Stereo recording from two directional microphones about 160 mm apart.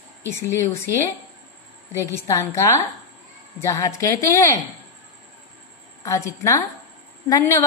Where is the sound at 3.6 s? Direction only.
20° left (ahead or behind).